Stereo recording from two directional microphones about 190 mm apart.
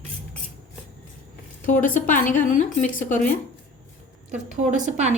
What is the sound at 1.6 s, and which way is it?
A woman's voice, 45° left (ahead or behind).